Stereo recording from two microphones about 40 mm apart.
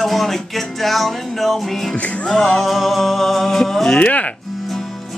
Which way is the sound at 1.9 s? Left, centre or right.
Left.